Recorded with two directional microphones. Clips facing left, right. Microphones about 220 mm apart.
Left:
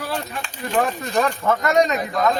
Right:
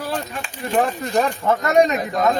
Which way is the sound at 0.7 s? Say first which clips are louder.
Right 2 dB; 25° right (ahead or behind).